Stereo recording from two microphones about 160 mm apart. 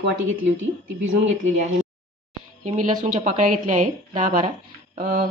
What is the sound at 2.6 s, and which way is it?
A woman's voice, 50° right (ahead or behind).